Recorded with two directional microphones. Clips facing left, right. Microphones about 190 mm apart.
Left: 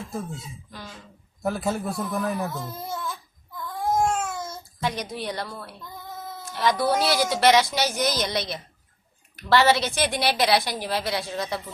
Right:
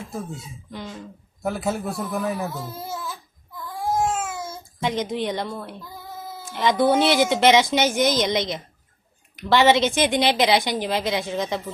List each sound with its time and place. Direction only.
0.7 s a woman's voice: 20° right (ahead or behind)
1.4 s a sound: centre (ahead or behind)
4.8 s a woman's voice: 20° right (ahead or behind)
5.8 s child singing: 5° right (ahead or behind)
6.5 s a woman's voice: 20° right (ahead or behind)